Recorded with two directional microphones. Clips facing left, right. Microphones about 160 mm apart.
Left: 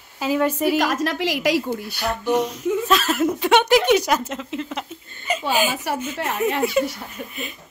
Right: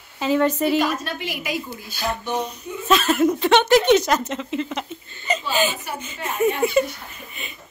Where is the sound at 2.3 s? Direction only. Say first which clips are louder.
Left 6 dB; 90° left.